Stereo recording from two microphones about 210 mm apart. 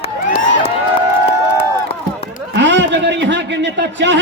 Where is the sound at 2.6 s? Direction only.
60° right (ahead or behind).